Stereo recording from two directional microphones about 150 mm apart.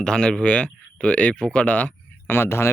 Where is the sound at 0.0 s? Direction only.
5° left (ahead or behind).